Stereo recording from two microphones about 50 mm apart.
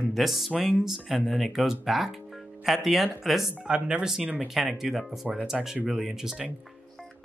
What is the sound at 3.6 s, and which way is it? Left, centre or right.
Speech, right.